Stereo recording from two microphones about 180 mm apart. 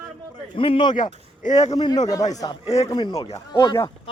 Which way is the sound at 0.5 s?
30° left (ahead or behind).